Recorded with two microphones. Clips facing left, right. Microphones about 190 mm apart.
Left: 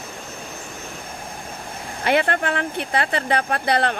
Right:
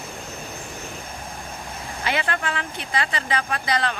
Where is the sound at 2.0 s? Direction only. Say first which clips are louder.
Left 6 dB; 55° left (ahead or behind).